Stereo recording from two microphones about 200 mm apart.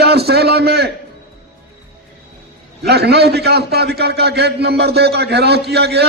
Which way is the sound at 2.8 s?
55° right (ahead or behind).